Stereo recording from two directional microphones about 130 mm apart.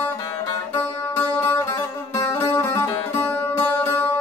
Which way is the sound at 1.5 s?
20° left (ahead or behind).